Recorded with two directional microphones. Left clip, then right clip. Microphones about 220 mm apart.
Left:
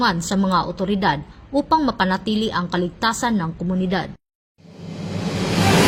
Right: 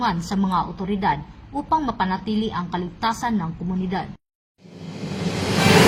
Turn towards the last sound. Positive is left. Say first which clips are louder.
# left 1 dB
turn(degrees=0)  # may be behind; listen again after turning